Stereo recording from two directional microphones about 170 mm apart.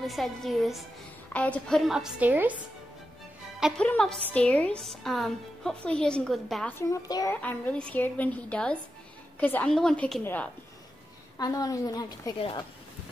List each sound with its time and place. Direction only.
0.0 s speech: centre (ahead or behind)
3.5 s a woman's voice: 5° right (ahead or behind)
6.8 s a woman's voice: 20° left (ahead or behind)
7.4 s a woman's voice: 10° left (ahead or behind)
11.3 s a woman's voice: 20° left (ahead or behind)
12.4 s speech: 30° left (ahead or behind)